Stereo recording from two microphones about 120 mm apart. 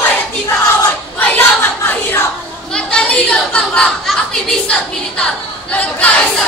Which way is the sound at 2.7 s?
10° left (ahead or behind).